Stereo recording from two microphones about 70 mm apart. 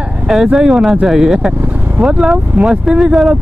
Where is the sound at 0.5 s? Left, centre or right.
Centre.